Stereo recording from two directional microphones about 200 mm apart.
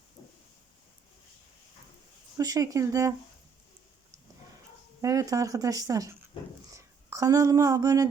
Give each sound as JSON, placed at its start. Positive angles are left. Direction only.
{"t": 0.2, "sound": "a sound", "side_deg": 25}
{"t": 2.4, "sound": "speech", "side_deg": -20}
{"t": 5.0, "sound": "speech", "side_deg": -15}